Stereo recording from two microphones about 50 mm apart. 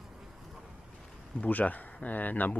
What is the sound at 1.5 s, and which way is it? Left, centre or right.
Speech, left.